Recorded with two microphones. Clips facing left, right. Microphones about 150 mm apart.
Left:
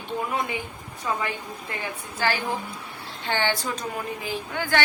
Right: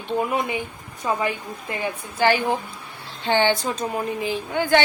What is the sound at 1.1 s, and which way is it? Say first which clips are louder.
A woman's voice: right 4 dB; 20° right (ahead or behind).